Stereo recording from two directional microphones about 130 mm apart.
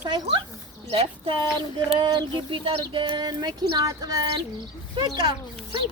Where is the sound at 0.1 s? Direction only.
40° right (ahead or behind).